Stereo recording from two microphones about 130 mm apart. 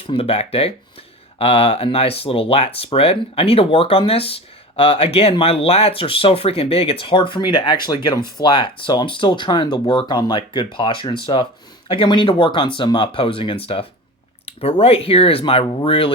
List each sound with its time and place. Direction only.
0.1 s speech: 50° left (ahead or behind)